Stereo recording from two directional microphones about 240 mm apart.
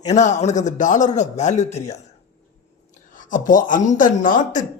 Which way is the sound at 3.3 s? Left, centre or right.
Left.